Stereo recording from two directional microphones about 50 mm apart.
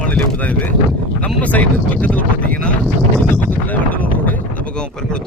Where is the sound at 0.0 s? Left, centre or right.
Left.